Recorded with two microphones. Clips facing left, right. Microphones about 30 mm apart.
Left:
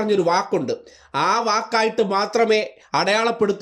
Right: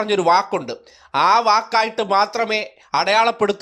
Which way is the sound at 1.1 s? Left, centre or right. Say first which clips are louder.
Right 5 dB; right.